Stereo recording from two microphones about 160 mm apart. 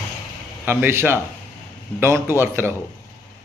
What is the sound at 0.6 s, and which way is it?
Speech, 15° right (ahead or behind).